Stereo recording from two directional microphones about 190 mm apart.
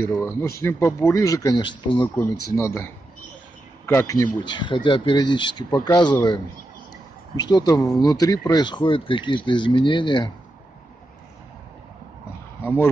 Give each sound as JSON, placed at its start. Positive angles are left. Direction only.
{"t": 0.0, "sound": "speech", "side_deg": 15}
{"t": 2.1, "sound": "a man's voice", "side_deg": 15}
{"t": 7.3, "sound": "speech", "side_deg": 20}
{"t": 12.6, "sound": "speech", "side_deg": 10}